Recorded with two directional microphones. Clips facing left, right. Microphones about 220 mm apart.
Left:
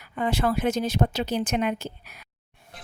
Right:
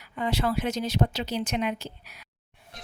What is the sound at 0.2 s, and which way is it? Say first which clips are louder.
Speech: left 3 dB; 50° left (ahead or behind).